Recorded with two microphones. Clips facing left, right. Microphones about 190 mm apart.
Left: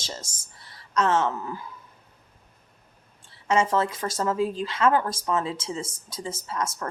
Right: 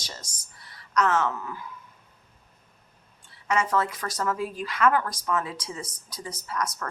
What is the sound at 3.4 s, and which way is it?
Speech, 25° left (ahead or behind).